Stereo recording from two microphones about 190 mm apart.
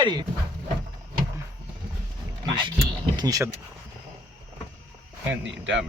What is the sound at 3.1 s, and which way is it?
Speech, 20° right (ahead or behind).